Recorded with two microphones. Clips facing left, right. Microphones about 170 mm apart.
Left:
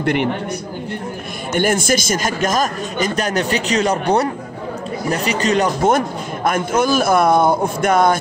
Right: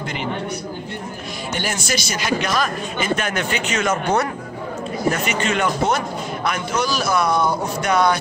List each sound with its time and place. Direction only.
0.0 s a man's voice: 60° left (ahead or behind)
1.5 s a man's voice: 50° left (ahead or behind)